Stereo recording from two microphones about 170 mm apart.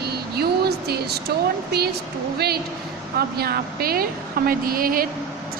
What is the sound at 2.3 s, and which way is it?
Speech, 70° right (ahead or behind).